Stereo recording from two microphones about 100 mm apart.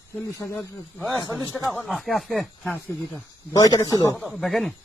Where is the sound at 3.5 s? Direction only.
35° left (ahead or behind).